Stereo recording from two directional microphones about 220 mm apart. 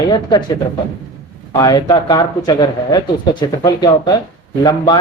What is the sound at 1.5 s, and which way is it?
Speech, 15° left (ahead or behind).